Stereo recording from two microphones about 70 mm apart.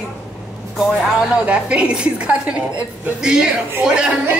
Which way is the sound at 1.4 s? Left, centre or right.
Centre.